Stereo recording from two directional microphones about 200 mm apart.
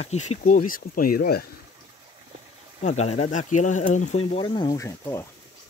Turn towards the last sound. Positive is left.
turn(degrees=15)  # may be behind; listen again after turning